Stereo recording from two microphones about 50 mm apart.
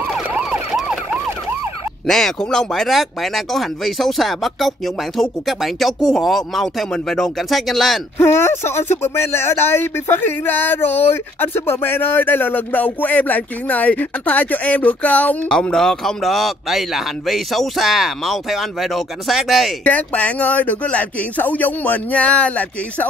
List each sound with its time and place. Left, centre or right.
0.3 s emergency vehicle: centre
0.7 s emergency vehicle: centre
2.0 s speech: centre
8.2 s speech: left
15.4 s speech: centre
19.8 s speech: left